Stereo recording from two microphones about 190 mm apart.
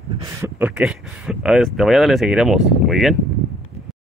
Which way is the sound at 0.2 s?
10° right (ahead or behind).